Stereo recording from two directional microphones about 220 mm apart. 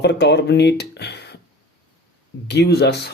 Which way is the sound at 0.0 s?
50° left (ahead or behind).